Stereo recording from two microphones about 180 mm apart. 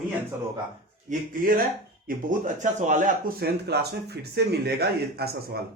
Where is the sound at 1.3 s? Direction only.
50° right (ahead or behind).